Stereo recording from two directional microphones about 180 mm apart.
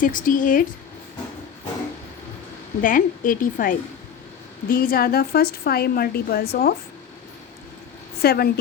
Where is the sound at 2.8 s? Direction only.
50° left (ahead or behind).